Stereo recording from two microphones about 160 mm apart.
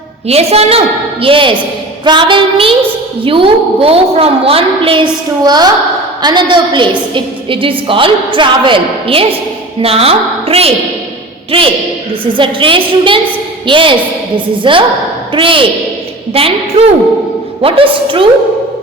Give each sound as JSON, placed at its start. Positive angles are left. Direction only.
{"t": 0.3, "sound": "a woman's voice", "side_deg": -40}